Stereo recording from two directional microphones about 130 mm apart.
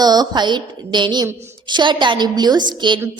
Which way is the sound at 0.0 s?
30° right (ahead or behind).